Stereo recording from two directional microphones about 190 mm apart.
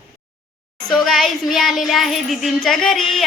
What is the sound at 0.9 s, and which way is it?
Child singing, centre (ahead or behind).